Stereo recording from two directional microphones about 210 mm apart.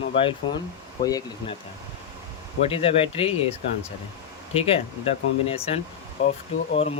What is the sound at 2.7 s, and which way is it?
Speech, 25° left (ahead or behind).